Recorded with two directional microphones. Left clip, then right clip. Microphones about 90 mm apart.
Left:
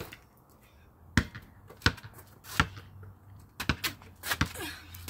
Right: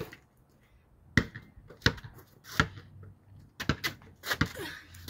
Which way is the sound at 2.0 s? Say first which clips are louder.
Left 1 dB; 15° right (ahead or behind).